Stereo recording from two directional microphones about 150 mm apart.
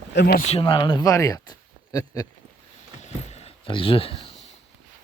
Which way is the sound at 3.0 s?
45° left (ahead or behind).